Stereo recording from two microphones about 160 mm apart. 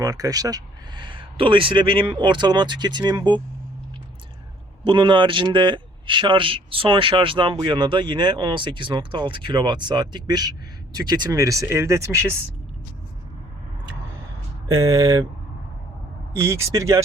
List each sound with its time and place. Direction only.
0.0 s speech: 25° right (ahead or behind)
4.8 s a man's voice: 30° right (ahead or behind)
14.7 s speech: 20° right (ahead or behind)
16.4 s speech: 15° right (ahead or behind)